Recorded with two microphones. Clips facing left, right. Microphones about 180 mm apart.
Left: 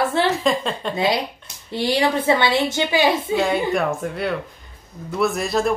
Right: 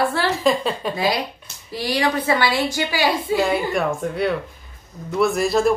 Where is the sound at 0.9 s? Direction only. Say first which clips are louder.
Left 1 dB; 25° left (ahead or behind).